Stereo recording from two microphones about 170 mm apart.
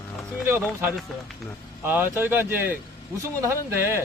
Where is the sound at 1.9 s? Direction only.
10° right (ahead or behind).